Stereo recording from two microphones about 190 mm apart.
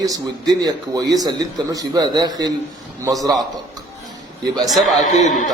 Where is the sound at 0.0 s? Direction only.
20° right (ahead or behind).